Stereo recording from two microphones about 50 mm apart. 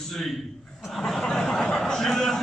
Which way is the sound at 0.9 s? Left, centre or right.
Centre.